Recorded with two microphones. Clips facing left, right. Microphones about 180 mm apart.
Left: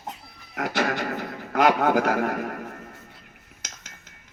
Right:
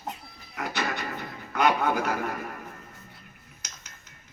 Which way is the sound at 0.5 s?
80° left.